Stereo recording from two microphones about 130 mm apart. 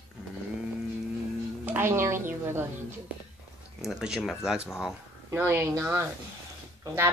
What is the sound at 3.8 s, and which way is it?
Speech, 5° right (ahead or behind).